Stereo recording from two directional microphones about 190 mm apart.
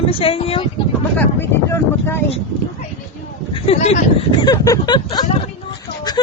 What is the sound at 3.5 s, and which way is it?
Speech, 35° left (ahead or behind).